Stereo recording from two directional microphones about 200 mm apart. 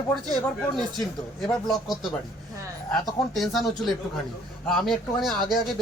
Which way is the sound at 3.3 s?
Centre (ahead or behind).